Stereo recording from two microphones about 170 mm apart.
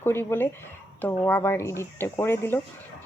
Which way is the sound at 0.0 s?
15° left (ahead or behind).